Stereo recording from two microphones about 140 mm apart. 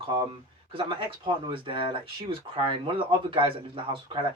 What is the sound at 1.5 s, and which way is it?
Speech, 40° right (ahead or behind).